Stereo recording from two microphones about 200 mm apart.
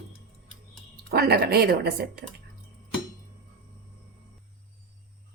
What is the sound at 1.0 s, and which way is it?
Speech, 50° right (ahead or behind).